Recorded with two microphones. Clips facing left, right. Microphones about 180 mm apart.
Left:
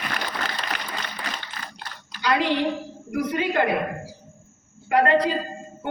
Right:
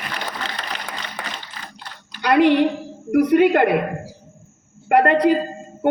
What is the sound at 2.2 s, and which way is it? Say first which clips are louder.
A woman's voice: right 7 dB; 60° right (ahead or behind).